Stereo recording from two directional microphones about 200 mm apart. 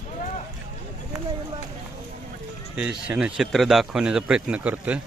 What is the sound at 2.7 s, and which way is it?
Speech, 5° right (ahead or behind).